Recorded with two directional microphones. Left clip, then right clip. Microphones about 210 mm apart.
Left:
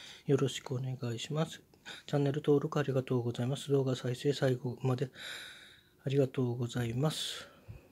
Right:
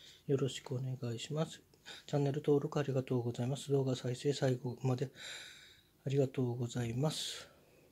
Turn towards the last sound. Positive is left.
turn(degrees=10)  # may be behind; listen again after turning